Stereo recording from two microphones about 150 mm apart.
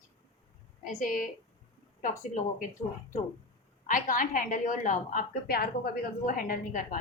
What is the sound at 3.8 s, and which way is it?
A woman's voice, 65° left (ahead or behind).